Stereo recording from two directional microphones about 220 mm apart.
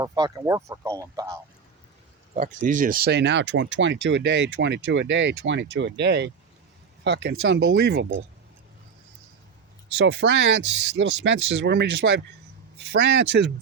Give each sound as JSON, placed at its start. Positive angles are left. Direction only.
{"t": 0.0, "sound": "speech", "side_deg": -15}
{"t": 2.4, "sound": "speech", "side_deg": -40}
{"t": 9.9, "sound": "speech", "side_deg": -50}